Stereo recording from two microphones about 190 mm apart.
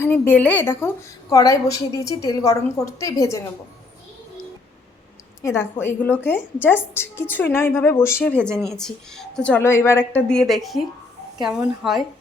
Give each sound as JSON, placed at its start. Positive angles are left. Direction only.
{"t": 0.0, "sound": "a woman's voice", "side_deg": 10}
{"t": 5.4, "sound": "a woman's voice", "side_deg": 15}